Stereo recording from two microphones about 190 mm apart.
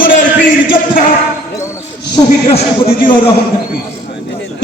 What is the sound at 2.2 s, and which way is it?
Speech, 20° left (ahead or behind).